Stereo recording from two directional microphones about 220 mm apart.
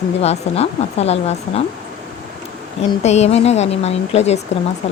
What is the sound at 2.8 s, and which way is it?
Speech, 30° left (ahead or behind).